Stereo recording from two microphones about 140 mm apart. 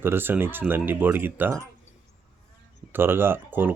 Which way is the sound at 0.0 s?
15° right (ahead or behind).